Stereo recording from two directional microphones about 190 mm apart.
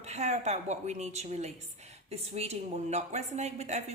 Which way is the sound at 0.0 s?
35° right (ahead or behind).